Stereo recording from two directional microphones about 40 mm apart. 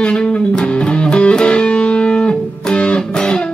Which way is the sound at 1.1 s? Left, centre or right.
Left.